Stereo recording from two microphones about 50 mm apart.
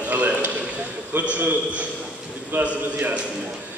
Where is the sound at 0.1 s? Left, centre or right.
Right.